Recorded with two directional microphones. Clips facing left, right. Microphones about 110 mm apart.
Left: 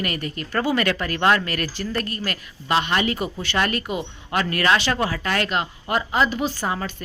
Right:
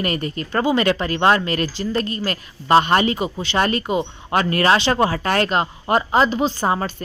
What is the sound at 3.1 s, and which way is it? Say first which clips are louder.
Speech: right 3 dB; 25° right (ahead or behind).